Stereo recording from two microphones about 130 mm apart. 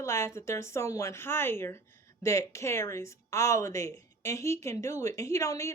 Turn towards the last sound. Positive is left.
turn(degrees=25)  # may be behind; listen again after turning